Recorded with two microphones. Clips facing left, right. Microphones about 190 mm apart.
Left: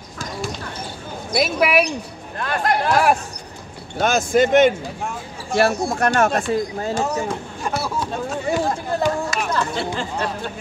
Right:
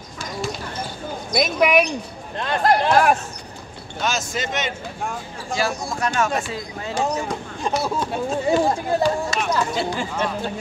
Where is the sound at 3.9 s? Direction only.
55° left (ahead or behind).